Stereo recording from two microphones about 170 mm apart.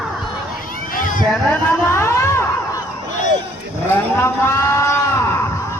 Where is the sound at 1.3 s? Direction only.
15° left (ahead or behind).